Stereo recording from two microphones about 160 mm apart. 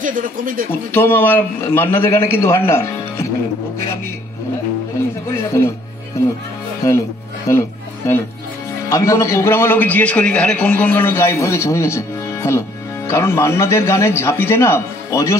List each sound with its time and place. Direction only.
0.0 s speech: 60° right (ahead or behind)
0.9 s a man's voice: 15° left (ahead or behind)
5.3 s a man's voice: 15° left (ahead or behind)
6.8 s speech: 20° left (ahead or behind)
8.8 s a man's voice: 20° left (ahead or behind)